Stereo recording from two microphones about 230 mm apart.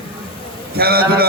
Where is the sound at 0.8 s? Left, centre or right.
Right.